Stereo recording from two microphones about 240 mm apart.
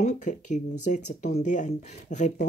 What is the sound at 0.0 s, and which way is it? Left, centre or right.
Speech, left.